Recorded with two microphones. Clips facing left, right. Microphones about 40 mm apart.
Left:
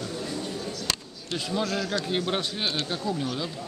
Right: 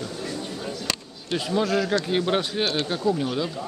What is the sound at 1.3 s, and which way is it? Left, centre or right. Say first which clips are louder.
Speech: right 5 dB; centre.